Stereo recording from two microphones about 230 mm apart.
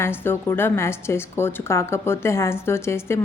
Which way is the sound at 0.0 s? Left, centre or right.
Centre.